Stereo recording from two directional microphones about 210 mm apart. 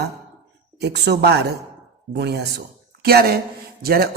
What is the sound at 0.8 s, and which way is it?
A man's voice, 50° right (ahead or behind).